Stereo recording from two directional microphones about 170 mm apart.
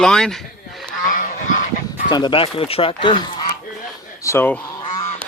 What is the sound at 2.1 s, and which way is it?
Speech, 25° left (ahead or behind).